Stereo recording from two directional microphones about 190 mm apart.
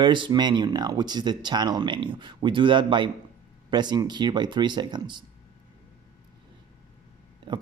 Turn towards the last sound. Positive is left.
turn(degrees=-25)  # may be behind; listen again after turning